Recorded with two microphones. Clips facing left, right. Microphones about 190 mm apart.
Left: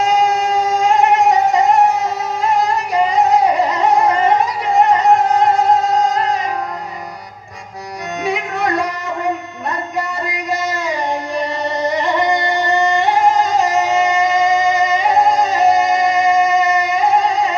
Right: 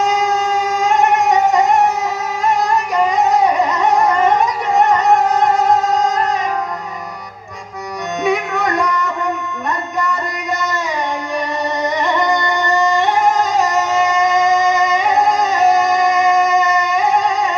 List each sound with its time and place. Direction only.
0.0 s wind instrument: 30° left (ahead or behind)
0.8 s music: 30° left (ahead or behind)
5.4 s music: 30° left (ahead or behind)
8.6 s music: 30° left (ahead or behind)
13.1 s music: 30° left (ahead or behind)